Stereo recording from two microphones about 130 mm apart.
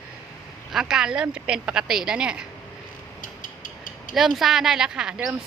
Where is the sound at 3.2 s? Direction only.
90° left.